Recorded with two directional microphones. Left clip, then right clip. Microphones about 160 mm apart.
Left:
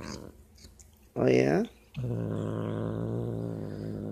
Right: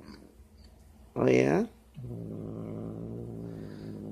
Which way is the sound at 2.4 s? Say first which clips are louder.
Left 6 dB; 25° left (ahead or behind).